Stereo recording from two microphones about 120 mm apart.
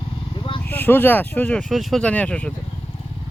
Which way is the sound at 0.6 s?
15° left (ahead or behind).